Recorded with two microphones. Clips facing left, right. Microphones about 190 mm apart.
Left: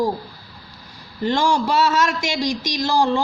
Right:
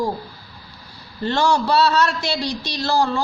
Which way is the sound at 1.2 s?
10° left (ahead or behind).